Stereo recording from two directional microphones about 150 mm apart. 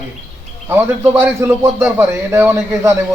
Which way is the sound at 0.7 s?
15° right (ahead or behind).